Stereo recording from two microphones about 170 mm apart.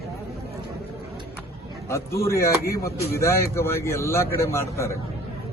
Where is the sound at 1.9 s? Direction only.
15° left (ahead or behind).